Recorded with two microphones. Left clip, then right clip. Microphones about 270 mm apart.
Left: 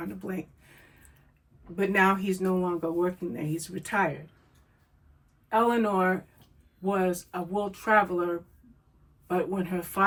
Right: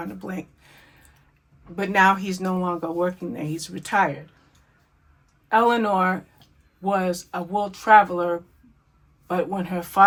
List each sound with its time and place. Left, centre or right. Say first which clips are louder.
0.0 s speech: right 3 dB; centre
1.7 s speech: right 6 dB; centre
5.5 s speech: right 6 dB; centre